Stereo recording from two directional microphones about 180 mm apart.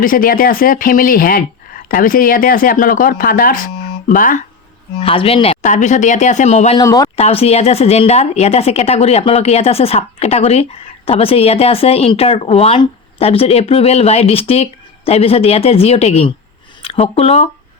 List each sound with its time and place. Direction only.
0.0 s speech: 50° left (ahead or behind)
4.9 s a woman's voice: 30° left (ahead or behind)
6.7 s speech: 20° left (ahead or behind)
7.2 s a woman's voice: 35° left (ahead or behind)